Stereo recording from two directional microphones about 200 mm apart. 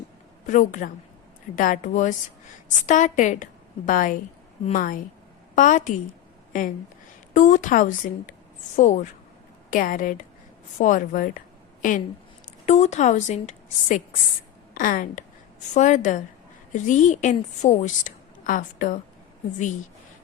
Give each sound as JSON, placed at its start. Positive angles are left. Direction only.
{"t": 0.4, "sound": "a woman's voice", "side_deg": 40}